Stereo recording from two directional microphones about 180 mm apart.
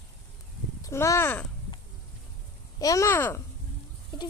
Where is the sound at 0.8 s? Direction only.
15° left (ahead or behind).